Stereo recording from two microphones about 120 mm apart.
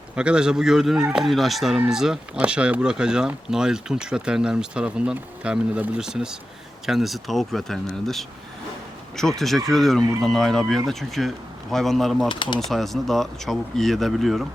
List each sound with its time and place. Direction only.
0.2 s speech: 5° right (ahead or behind)
12.3 s speech: 40° left (ahead or behind)
12.5 s speech: centre (ahead or behind)